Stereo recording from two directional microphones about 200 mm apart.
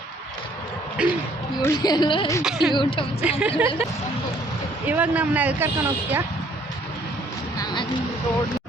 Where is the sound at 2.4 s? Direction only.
Centre (ahead or behind).